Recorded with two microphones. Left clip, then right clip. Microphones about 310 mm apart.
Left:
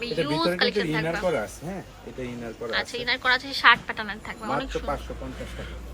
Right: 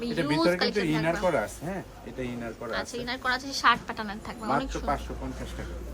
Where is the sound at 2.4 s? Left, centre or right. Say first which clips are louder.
Left 7 dB; centre.